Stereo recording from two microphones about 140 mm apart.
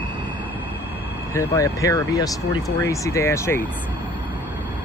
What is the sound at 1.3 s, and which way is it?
Speech, 20° left (ahead or behind).